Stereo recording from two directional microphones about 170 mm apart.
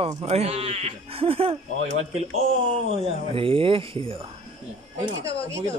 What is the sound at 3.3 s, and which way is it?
Speech, 30° right (ahead or behind).